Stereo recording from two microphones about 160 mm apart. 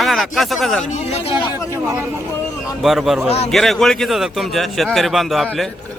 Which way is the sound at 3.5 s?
Centre (ahead or behind).